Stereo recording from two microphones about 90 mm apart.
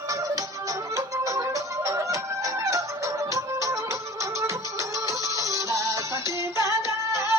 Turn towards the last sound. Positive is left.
turn(degrees=-30)  # may be behind; listen again after turning